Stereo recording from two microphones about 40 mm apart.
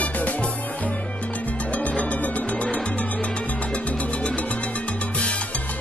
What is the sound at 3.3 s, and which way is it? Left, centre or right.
Music, left.